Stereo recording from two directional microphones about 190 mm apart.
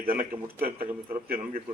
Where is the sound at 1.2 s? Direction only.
50° right (ahead or behind).